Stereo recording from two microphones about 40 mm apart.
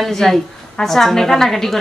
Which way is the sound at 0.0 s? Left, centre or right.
Centre.